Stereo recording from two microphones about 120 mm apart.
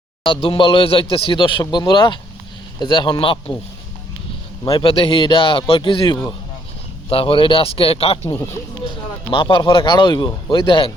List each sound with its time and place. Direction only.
0.4 s speech: 45° left (ahead or behind)
4.6 s speech: 50° left (ahead or behind)